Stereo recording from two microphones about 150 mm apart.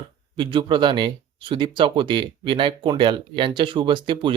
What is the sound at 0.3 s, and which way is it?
Speech, 35° right (ahead or behind).